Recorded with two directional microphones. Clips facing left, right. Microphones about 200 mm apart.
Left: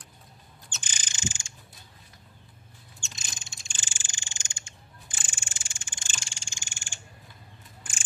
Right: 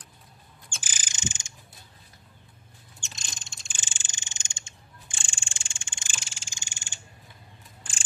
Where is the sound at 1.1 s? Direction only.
20° right (ahead or behind).